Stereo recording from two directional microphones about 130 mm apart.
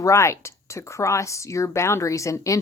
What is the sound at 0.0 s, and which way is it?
A woman's voice, 20° left (ahead or behind).